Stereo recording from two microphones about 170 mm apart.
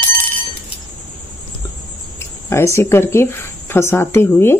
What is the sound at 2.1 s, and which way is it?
Speech, 15° left (ahead or behind).